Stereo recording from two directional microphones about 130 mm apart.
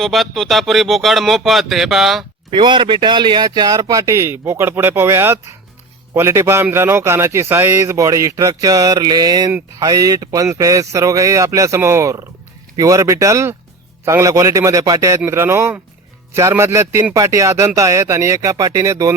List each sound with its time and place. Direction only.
0.0 s speech: centre (ahead or behind)
2.5 s a man's voice: 40° right (ahead or behind)